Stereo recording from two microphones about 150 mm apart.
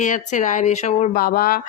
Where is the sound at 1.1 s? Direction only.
80° left.